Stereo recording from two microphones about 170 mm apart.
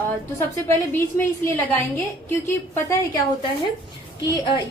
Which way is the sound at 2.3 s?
15° left (ahead or behind).